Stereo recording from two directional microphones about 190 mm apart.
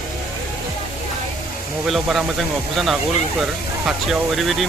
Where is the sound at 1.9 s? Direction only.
Centre (ahead or behind).